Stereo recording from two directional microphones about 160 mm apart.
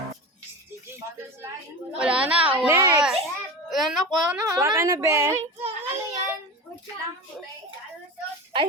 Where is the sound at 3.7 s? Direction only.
Centre (ahead or behind).